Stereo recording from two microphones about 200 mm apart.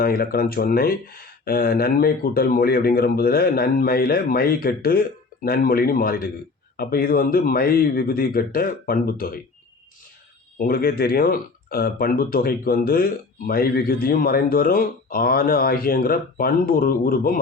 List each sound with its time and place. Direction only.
0.0 s speech: 50° left (ahead or behind)
10.6 s speech: 50° left (ahead or behind)